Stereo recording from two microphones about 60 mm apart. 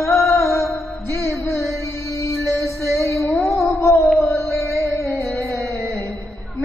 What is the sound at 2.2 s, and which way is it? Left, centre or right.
Music, left.